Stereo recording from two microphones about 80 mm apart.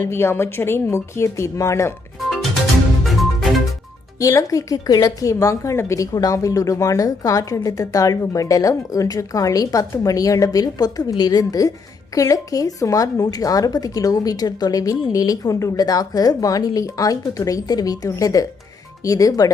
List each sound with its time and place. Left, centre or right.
0.0 s speech: left
3.0 s music: centre
4.2 s a woman's voice: left
6.1 s a woman's voice: left
15.8 s a woman's voice: left